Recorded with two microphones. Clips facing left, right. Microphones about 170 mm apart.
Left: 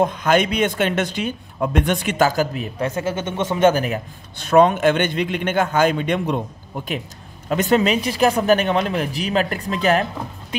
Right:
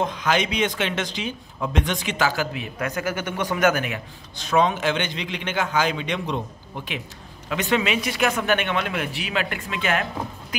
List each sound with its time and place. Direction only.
0.0 s speech: 50° left (ahead or behind)
2.9 s speech: 25° left (ahead or behind)
4.4 s a man's voice: 55° left (ahead or behind); by 10.0 s 35° left (ahead or behind)